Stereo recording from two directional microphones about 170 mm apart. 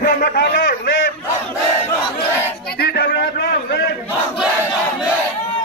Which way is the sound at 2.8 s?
70° left (ahead or behind).